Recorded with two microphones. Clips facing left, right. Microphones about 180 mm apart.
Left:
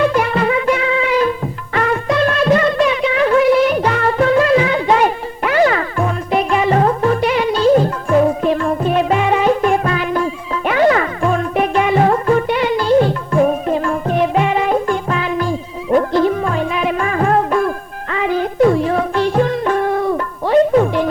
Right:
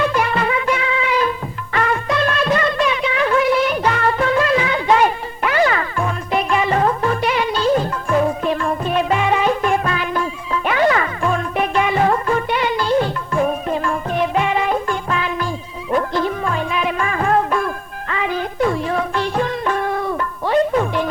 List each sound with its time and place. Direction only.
0.0 s music: 45° left (ahead or behind)